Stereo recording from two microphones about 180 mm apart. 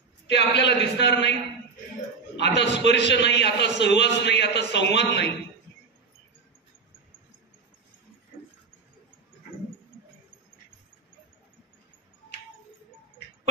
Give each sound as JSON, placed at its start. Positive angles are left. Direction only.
{"t": 0.3, "sound": "a man's voice", "side_deg": 75}
{"t": 2.3, "sound": "a man's voice", "side_deg": 70}